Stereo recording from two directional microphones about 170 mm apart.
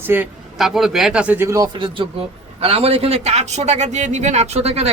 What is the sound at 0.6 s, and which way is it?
Speech, centre (ahead or behind).